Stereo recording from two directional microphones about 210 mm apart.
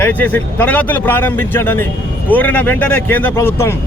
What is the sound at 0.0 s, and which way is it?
Speech, 10° left (ahead or behind).